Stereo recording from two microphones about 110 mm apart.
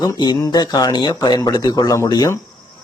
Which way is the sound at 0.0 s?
40° left (ahead or behind).